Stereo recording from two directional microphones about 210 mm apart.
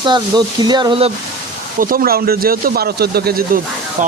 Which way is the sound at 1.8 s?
45° right (ahead or behind).